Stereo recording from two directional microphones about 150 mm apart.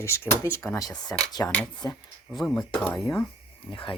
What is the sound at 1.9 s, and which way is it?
Speech, centre (ahead or behind).